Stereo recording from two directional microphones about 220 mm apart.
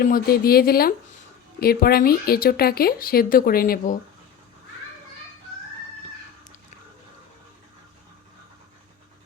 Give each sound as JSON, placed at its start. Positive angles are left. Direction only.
{"t": 0.0, "sound": "speech", "side_deg": 40}